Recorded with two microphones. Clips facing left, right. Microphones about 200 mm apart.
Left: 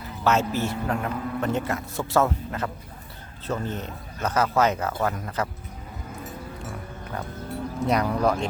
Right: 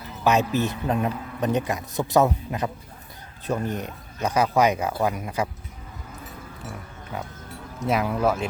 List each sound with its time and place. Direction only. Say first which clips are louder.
0.3 s a man's voice: right 2 dB; 15° right (ahead or behind)
7.9 s speech: even; 5° right (ahead or behind)